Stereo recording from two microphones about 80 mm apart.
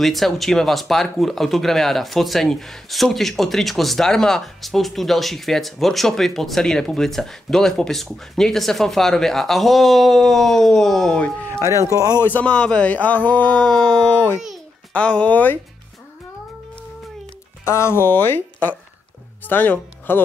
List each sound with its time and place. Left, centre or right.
0.0 s speech: centre
12.2 s speech: left
17.6 s speech: left